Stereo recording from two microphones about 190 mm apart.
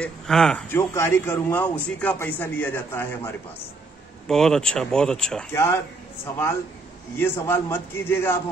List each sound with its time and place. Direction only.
0.0 s a man's voice: 5° left (ahead or behind)
7.2 s a man's voice: 10° left (ahead or behind)